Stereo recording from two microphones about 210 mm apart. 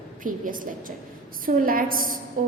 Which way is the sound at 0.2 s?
40° right (ahead or behind).